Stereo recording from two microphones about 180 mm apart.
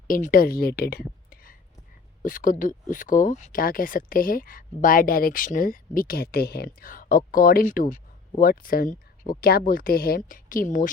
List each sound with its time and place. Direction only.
0.1 s a woman's voice: 50° left (ahead or behind)